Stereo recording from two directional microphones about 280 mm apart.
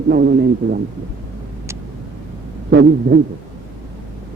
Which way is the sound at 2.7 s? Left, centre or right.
Right.